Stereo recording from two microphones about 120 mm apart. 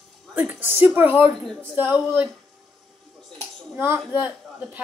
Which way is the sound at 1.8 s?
10° right (ahead or behind).